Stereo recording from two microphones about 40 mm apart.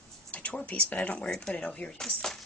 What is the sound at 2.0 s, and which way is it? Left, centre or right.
Speech, centre.